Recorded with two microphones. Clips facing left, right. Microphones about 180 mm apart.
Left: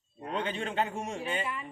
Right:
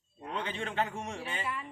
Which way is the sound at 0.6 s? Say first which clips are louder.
Left 2 dB; 25° left (ahead or behind).